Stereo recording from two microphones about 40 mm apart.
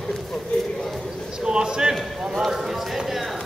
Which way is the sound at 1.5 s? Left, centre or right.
Centre.